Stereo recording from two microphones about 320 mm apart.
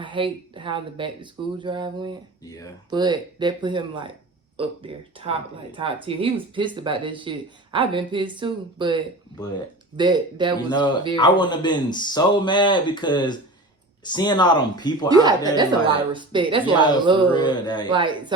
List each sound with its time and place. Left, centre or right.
0.0 s speech: centre
2.4 s speech: centre
2.9 s speech: centre
11.2 s speech: centre
15.1 s speech: centre
17.2 s speech: centre
17.8 s speech: centre